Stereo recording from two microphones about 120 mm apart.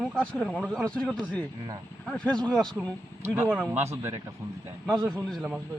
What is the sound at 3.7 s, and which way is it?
Speech, 20° right (ahead or behind).